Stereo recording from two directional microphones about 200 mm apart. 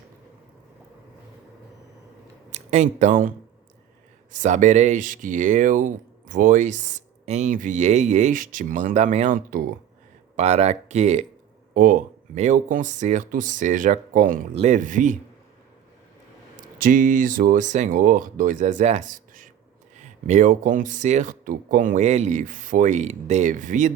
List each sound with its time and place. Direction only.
2.5 s speech: 35° right (ahead or behind)
16.6 s speech: 45° right (ahead or behind)